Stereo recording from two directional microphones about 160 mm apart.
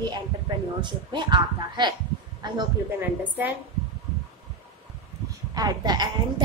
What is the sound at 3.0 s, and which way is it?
Speech, 10° right (ahead or behind).